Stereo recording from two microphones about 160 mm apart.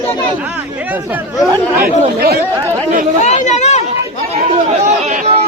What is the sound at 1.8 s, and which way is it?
Speech, 70° right (ahead or behind).